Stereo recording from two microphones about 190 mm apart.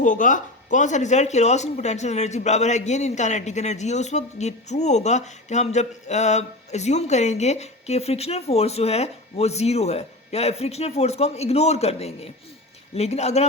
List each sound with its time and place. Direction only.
0.0 s speech: 40° left (ahead or behind)